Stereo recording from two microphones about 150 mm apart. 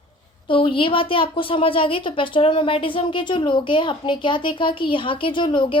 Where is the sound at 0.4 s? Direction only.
35° left (ahead or behind).